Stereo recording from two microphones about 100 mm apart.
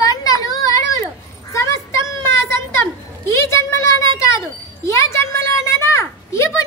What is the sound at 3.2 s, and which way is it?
Wind chime, 25° left (ahead or behind).